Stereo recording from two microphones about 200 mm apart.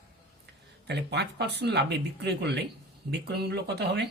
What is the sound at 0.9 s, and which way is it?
Speech, 55° right (ahead or behind).